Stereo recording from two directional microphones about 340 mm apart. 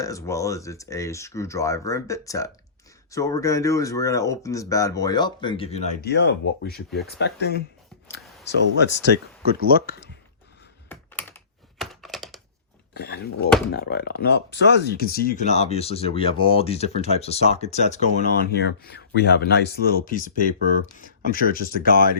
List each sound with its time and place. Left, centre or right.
0.0 s speech: centre; by 10.1 s left
10.8 s computer keyboard: centre
12.9 s a sound: left
13.7 s speech: left